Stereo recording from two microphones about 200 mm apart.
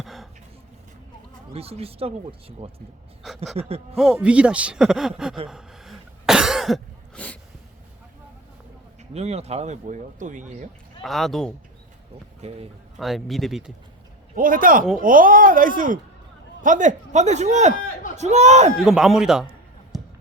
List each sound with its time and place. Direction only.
0.0 s a sound: centre (ahead or behind)
1.5 s speech: 30° right (ahead or behind)
3.9 s speech: centre (ahead or behind)
5.5 s cough: centre (ahead or behind)
9.1 s speech: 30° right (ahead or behind)
11.0 s speech: centre (ahead or behind)
12.4 s speech: 30° right (ahead or behind)
13.0 s speech: centre (ahead or behind)
14.3 s speech: 45° right (ahead or behind)
17.7 s speech: 45° left (ahead or behind)
18.2 s speech: 35° right (ahead or behind)
18.8 s speech: centre (ahead or behind)
19.9 s a sound: centre (ahead or behind)